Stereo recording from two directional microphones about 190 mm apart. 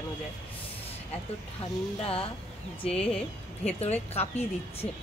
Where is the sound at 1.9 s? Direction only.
30° left (ahead or behind).